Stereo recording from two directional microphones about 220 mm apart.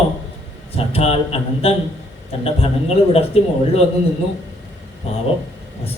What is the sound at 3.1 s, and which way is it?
Speech, 25° left (ahead or behind).